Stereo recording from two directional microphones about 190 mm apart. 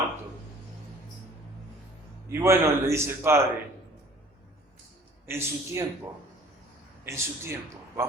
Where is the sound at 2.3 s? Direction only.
15° right (ahead or behind).